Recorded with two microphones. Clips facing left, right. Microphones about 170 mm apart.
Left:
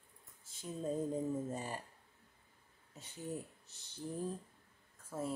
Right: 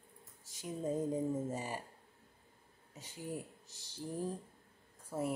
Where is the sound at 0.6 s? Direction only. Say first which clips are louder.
Right 2 dB; 10° right (ahead or behind).